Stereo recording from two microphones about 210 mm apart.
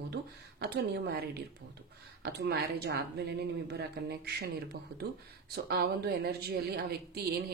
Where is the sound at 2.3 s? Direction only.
50° right (ahead or behind).